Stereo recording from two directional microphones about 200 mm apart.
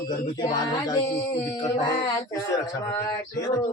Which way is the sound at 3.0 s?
20° left (ahead or behind).